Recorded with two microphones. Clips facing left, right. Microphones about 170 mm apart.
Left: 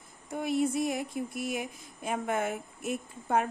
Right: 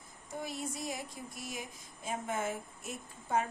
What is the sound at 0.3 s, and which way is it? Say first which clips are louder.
Speech: left 11 dB; 60° left (ahead or behind).